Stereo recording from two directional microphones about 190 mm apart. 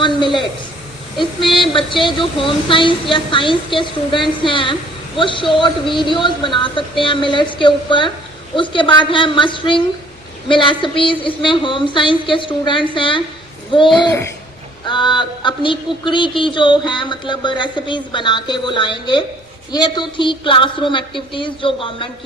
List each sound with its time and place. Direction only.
1.5 s speech: 25° left (ahead or behind)